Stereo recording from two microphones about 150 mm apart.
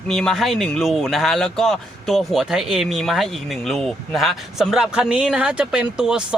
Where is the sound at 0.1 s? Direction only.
Centre (ahead or behind).